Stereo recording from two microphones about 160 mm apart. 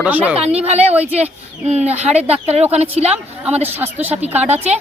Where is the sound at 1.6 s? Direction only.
45° right (ahead or behind).